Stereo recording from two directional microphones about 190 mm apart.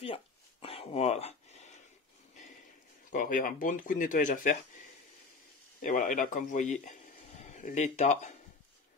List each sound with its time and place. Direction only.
0.0 s a sound: 30° left (ahead or behind)
3.1 s speech: 45° left (ahead or behind)
5.8 s speech: 40° left (ahead or behind)